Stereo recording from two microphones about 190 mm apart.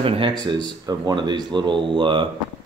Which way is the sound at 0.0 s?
25° right (ahead or behind).